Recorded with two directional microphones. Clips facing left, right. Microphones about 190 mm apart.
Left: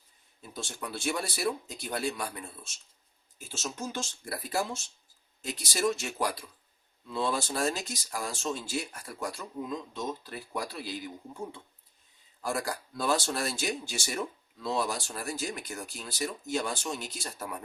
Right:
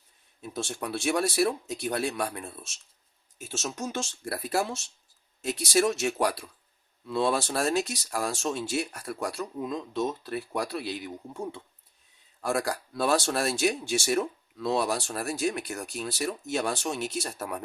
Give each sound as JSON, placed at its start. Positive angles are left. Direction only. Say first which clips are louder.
{"t": 0.5, "sound": "speech", "louder": "right 6 dB", "side_deg": -65}
{"t": 3.5, "sound": "speech", "louder": "right 3 dB", "side_deg": -70}
{"t": 5.6, "sound": "speech", "louder": "right 5 dB", "side_deg": -65}
{"t": 12.4, "sound": "speech", "louder": "right 4 dB", "side_deg": -70}